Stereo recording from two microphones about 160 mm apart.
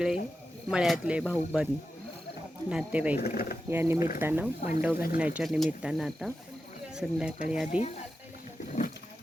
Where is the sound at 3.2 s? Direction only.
70° left (ahead or behind).